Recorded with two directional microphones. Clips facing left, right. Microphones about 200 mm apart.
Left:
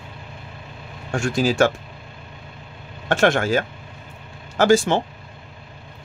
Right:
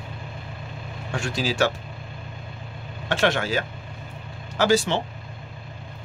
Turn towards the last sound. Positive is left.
turn(degrees=50)  # may be behind; listen again after turning